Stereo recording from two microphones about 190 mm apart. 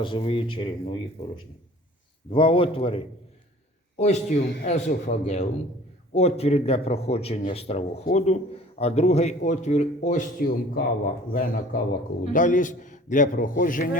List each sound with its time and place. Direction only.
0.0 s speech: 25° left (ahead or behind)
2.3 s a man's voice: 25° left (ahead or behind); by 14.0 s 45° left (ahead or behind)